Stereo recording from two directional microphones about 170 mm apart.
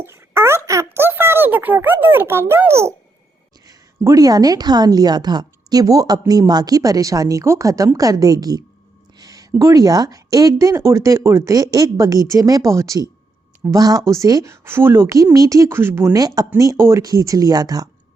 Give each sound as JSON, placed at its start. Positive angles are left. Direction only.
{"t": 0.0, "sound": "a woman's voice", "side_deg": -15}